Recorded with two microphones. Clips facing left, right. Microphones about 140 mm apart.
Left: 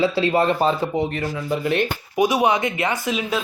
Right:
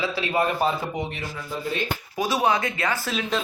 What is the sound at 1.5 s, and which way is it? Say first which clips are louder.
Speech: left 8 dB; 70° left (ahead or behind).